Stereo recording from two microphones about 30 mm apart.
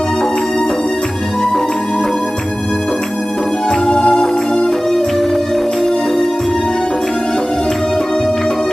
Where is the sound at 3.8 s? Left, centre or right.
Left.